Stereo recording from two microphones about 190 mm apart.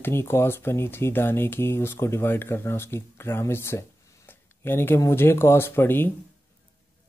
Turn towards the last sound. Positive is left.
turn(degrees=10)  # may be behind; listen again after turning